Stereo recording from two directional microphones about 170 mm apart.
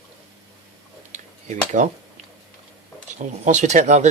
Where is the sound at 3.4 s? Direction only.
45° right (ahead or behind).